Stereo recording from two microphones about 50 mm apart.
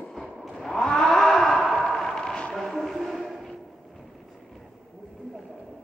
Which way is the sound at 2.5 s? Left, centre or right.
Centre.